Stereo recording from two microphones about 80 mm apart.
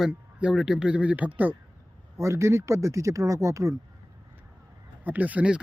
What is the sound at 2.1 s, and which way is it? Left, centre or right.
Speech, right.